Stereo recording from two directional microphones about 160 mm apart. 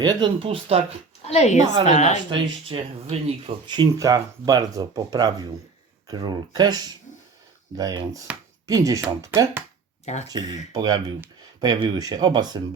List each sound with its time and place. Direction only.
0.0 s speech: 25° right (ahead or behind)
1.2 s speech: 40° left (ahead or behind)
2.3 s speech: 35° right (ahead or behind)
3.7 s speech: 25° right (ahead or behind)
10.1 s speech: 45° left (ahead or behind)
11.6 s speech: 25° right (ahead or behind)